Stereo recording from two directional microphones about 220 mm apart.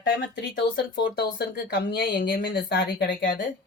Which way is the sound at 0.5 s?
55° left (ahead or behind).